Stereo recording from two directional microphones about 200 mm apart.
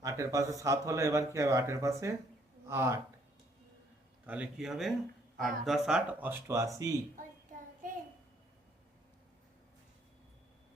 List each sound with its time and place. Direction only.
0.0 s a sound: 15° right (ahead or behind)
0.6 s speech: 15° right (ahead or behind)
4.3 s speech: 5° right (ahead or behind)